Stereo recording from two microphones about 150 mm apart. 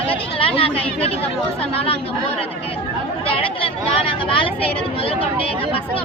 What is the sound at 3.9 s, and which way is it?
Speech, 35° left (ahead or behind).